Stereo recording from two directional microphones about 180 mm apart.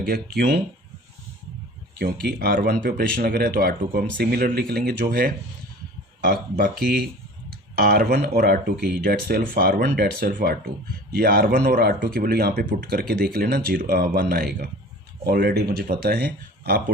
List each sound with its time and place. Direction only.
0.0 s speech: 55° right (ahead or behind)
2.0 s speech: 55° right (ahead or behind)